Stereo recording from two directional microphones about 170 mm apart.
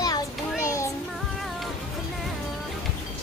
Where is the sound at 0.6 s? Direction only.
20° left (ahead or behind).